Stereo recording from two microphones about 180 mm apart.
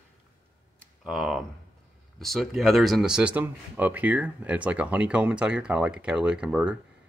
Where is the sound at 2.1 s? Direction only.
Centre (ahead or behind).